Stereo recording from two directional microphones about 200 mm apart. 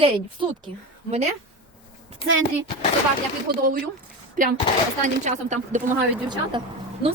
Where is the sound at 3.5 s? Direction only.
50° right (ahead or behind).